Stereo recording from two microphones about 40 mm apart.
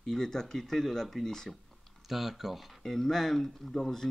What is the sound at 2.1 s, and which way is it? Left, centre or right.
Speech, centre.